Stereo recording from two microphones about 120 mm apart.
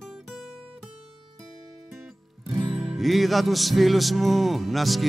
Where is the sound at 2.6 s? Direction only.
5° right (ahead or behind).